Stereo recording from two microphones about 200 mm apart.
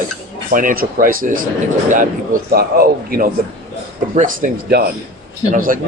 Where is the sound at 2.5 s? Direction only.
45° right (ahead or behind).